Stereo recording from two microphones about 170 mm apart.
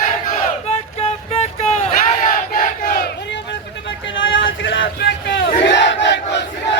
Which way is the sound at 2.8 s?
55° left (ahead or behind).